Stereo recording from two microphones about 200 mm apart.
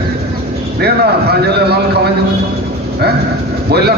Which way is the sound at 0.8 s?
55° right (ahead or behind).